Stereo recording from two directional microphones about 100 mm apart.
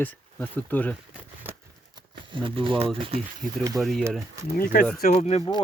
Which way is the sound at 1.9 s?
55° right (ahead or behind).